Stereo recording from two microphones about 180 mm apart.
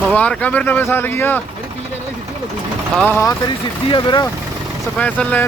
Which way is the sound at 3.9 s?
25° left (ahead or behind).